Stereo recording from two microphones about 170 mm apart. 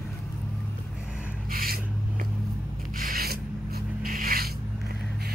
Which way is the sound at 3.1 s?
60° right (ahead or behind).